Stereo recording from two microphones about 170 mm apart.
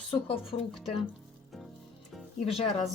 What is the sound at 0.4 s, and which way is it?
Speech, centre (ahead or behind).